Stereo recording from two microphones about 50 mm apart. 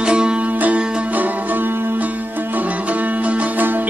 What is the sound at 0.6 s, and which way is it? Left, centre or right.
Music, right.